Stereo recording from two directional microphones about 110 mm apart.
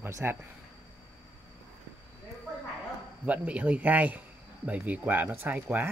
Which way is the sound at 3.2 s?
15° right (ahead or behind).